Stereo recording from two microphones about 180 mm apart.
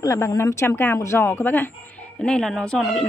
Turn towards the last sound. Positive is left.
turn(degrees=5)  # may be behind; listen again after turning